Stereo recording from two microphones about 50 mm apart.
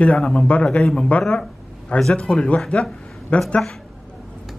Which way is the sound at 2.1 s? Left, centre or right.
Left.